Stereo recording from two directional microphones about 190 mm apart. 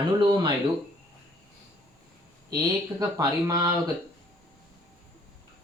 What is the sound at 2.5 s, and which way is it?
Speech, 20° right (ahead or behind).